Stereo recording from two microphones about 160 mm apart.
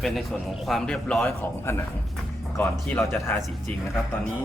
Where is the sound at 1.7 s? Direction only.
15° left (ahead or behind).